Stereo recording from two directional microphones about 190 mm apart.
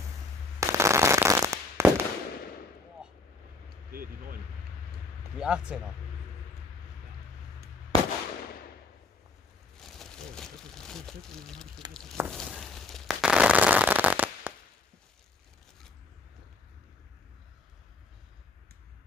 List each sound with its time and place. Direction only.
0.6 s fireworks: 15° right (ahead or behind)
3.9 s speech: 50° right (ahead or behind)
5.4 s speech: 5° right (ahead or behind)
7.9 s firecracker: 20° left (ahead or behind)
9.8 s crumpling: centre (ahead or behind)
11.9 s speech: centre (ahead or behind)
12.3 s firecracker: centre (ahead or behind)